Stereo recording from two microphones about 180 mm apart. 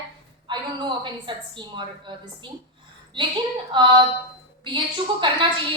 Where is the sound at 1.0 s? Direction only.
25° right (ahead or behind).